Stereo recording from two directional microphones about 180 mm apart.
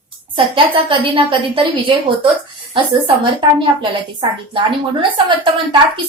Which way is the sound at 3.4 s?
25° right (ahead or behind).